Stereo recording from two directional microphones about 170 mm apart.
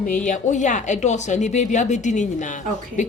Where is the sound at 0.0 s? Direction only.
50° left (ahead or behind).